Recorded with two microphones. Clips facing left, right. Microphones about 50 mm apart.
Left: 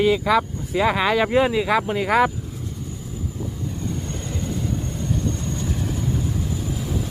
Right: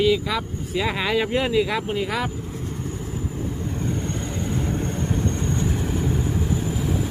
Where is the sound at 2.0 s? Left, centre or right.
Left.